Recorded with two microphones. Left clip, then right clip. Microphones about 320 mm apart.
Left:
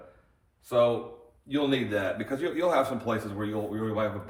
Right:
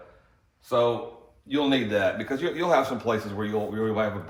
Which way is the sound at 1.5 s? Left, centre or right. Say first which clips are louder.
Right 3 dB; right.